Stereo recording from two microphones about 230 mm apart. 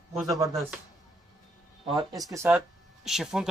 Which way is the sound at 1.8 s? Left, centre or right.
Centre.